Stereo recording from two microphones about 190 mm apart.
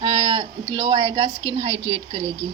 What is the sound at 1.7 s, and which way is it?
Speech, 90° right.